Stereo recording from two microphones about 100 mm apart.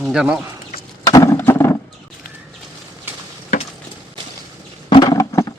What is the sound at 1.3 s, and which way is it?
Wild animals, 25° left (ahead or behind).